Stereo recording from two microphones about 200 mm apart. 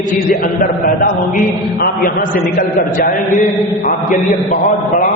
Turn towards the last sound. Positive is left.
turn(degrees=40)  # may be behind; listen again after turning